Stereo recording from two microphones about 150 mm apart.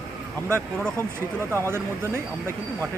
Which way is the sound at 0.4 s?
15° right (ahead or behind).